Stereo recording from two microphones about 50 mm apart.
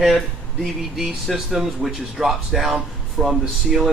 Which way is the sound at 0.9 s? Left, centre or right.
Centre.